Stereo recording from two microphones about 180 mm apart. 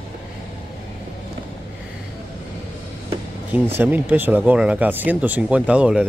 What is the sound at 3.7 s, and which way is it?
Speech, 10° right (ahead or behind).